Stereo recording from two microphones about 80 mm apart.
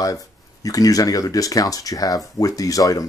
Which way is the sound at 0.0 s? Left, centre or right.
Left.